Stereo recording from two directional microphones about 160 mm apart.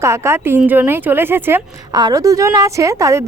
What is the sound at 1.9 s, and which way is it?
A woman's voice, 25° right (ahead or behind).